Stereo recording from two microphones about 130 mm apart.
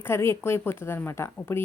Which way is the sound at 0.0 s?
20° left (ahead or behind).